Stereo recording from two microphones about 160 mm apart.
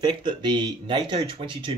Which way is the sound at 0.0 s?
30° right (ahead or behind).